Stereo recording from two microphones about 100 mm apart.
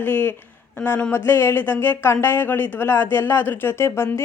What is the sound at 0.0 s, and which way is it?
Speech, 20° left (ahead or behind).